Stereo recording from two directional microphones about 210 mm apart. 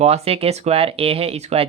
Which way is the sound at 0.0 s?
30° right (ahead or behind).